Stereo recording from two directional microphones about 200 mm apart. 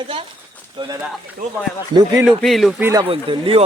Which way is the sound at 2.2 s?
Centre (ahead or behind).